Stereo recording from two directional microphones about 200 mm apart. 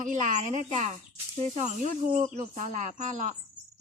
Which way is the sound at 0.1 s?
40° right (ahead or behind).